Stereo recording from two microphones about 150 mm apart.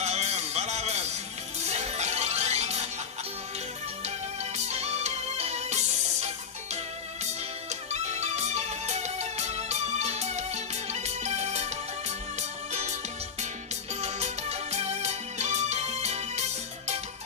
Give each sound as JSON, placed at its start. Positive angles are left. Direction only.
{"t": 0.0, "sound": "music", "side_deg": -45}
{"t": 4.5, "sound": "music", "side_deg": -45}
{"t": 14.0, "sound": "music", "side_deg": -45}